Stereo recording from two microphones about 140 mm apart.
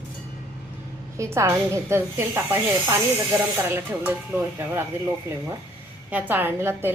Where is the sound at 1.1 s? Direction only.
20° right (ahead or behind).